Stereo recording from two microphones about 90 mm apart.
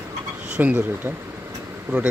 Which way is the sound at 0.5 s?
20° right (ahead or behind).